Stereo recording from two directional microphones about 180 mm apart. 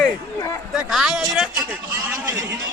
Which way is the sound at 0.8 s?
Centre (ahead or behind).